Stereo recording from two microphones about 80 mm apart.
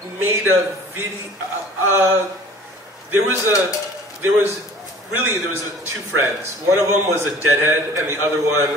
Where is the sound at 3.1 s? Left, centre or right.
Right.